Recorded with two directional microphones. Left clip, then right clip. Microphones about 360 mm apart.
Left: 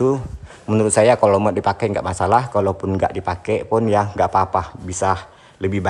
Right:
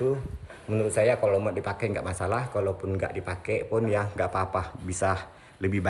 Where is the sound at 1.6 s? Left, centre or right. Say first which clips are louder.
Left 11 dB; centre.